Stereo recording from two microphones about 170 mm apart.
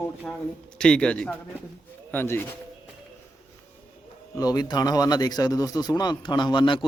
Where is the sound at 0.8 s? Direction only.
5° left (ahead or behind).